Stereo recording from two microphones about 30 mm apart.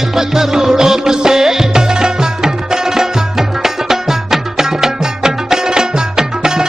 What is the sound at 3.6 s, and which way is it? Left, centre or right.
Music, centre.